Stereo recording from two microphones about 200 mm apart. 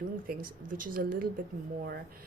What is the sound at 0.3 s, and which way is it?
Speech, 45° right (ahead or behind).